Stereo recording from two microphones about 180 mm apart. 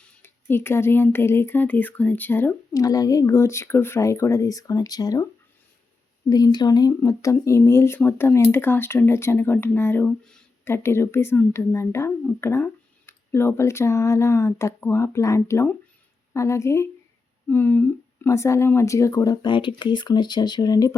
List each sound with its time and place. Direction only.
0.0 s speech: 10° left (ahead or behind)
6.3 s speech: 20° left (ahead or behind)